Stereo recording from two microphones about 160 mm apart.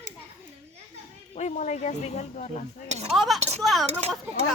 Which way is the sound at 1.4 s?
50° left (ahead or behind).